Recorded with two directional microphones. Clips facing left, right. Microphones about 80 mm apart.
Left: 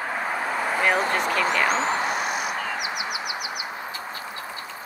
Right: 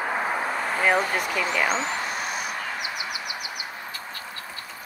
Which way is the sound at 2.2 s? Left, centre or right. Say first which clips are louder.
Left 3 dB; centre.